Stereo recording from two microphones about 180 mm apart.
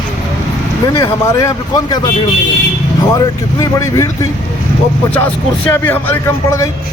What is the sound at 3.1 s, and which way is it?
Speech, 20° left (ahead or behind).